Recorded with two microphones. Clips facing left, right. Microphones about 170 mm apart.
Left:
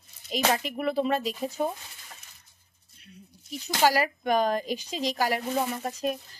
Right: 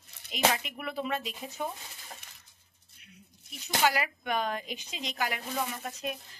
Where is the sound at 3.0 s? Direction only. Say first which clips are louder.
Left 6 dB; 35° left (ahead or behind).